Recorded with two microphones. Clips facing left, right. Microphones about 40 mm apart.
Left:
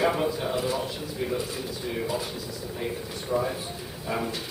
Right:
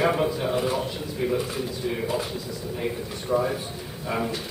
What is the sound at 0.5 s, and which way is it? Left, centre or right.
Speech, centre.